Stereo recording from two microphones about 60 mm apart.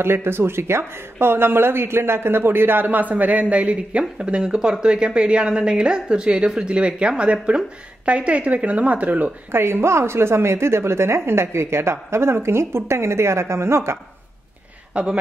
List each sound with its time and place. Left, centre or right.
0.0 s a woman's voice: right
9.5 s a woman's voice: right
15.0 s speech: right